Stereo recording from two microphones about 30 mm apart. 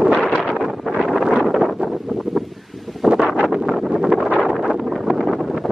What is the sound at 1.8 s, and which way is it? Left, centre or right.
Wind noise, right.